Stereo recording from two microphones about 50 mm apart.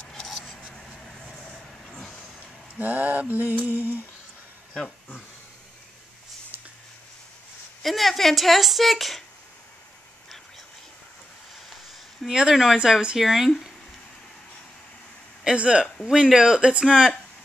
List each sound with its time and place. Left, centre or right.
0.0 s a sound: centre
2.8 s mantra: right
7.8 s a woman's voice: centre
12.3 s speech: centre
15.4 s speech: right
16.8 s speech: centre